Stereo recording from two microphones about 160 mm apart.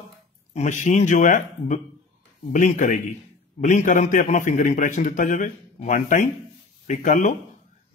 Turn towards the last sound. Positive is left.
turn(degrees=50)  # may be behind; listen again after turning